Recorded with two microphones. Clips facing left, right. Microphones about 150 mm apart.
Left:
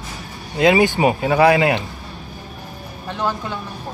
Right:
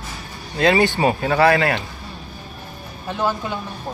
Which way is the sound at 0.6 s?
15° left (ahead or behind).